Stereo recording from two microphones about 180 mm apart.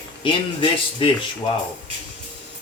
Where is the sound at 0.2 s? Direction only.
30° left (ahead or behind).